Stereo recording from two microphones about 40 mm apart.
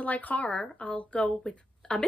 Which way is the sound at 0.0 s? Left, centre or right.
Left.